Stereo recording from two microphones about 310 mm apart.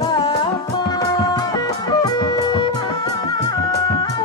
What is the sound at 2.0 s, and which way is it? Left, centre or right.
Music, centre.